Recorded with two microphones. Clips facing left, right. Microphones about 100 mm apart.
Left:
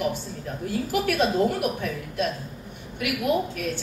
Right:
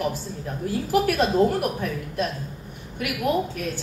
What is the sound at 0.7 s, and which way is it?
A woman's voice, 40° right (ahead or behind).